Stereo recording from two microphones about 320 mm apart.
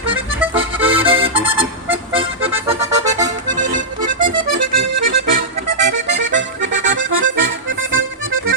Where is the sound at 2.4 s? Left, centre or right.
Centre.